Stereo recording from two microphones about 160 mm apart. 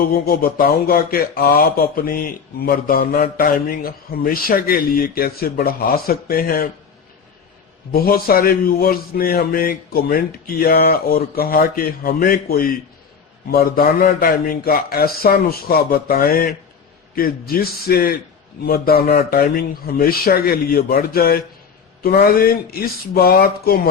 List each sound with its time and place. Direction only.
0.3 s speech: 65° left (ahead or behind)
7.9 s speech: 70° left (ahead or behind)